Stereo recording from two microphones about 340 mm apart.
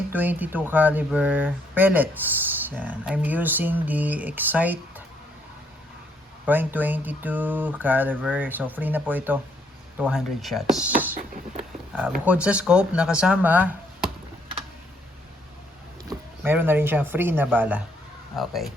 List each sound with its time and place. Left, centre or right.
0.1 s speech: centre
6.4 s speech: centre
11.1 s a sound: right
12.2 s speech: centre
16.0 s speech: centre